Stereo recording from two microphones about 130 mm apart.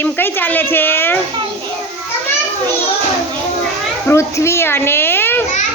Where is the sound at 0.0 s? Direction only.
15° left (ahead or behind).